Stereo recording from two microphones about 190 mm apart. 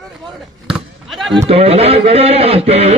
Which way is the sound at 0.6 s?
Centre (ahead or behind).